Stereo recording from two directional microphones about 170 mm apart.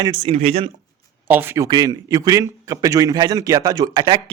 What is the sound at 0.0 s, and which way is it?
Speech, 30° right (ahead or behind).